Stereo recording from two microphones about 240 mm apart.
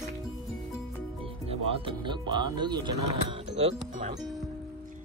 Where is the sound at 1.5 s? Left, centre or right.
Right.